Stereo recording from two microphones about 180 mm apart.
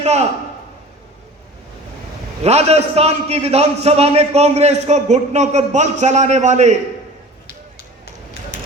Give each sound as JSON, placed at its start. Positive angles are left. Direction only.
{"t": 0.0, "sound": "a man's voice", "side_deg": -40}
{"t": 2.4, "sound": "a man's voice", "side_deg": -35}